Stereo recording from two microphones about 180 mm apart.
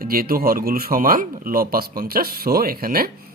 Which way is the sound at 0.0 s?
55° right (ahead or behind).